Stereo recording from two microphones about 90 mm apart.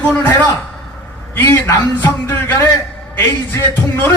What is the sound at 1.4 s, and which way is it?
Speech, 20° left (ahead or behind).